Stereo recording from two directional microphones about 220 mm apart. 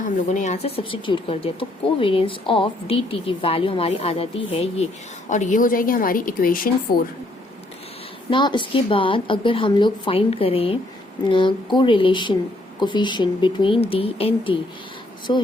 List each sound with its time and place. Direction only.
0.0 s a woman's voice: 35° left (ahead or behind)
8.3 s speech: 20° left (ahead or behind)